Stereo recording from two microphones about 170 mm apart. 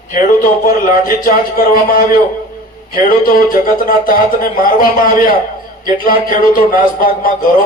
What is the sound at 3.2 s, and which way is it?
A man's voice, 55° left (ahead or behind).